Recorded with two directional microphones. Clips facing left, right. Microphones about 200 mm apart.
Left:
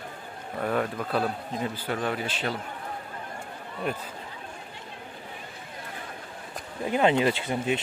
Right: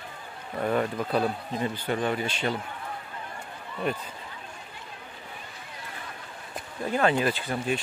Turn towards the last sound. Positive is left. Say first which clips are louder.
# left 1 dB
turn(degrees=20)  # may be behind; listen again after turning